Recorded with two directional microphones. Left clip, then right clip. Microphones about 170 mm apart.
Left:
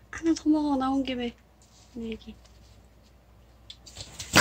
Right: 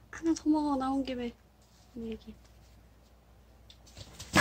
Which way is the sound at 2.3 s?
5° left (ahead or behind).